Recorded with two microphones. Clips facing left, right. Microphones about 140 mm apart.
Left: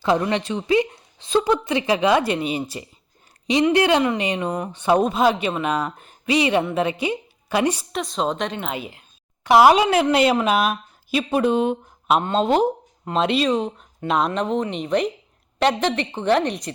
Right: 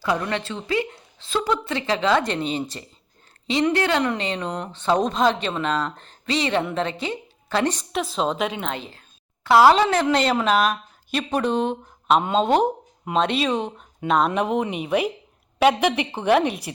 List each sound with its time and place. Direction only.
0.0 s a woman's voice: 25° left (ahead or behind)
7.9 s speech: centre (ahead or behind)
8.7 s speech: 10° left (ahead or behind)
9.8 s speech: 5° left (ahead or behind)
12.2 s speech: 5° right (ahead or behind)
14.3 s a woman's voice: 10° right (ahead or behind)